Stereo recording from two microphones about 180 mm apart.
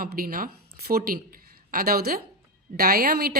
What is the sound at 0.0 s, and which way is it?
A woman's voice, 55° right (ahead or behind).